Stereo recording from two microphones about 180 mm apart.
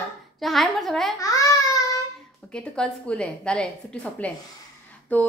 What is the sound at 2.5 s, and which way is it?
A woman's voice, 5° left (ahead or behind).